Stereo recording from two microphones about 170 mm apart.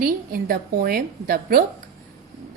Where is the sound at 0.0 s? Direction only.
60° right (ahead or behind).